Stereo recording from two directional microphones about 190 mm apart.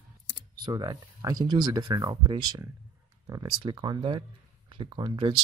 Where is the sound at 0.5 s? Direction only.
20° right (ahead or behind).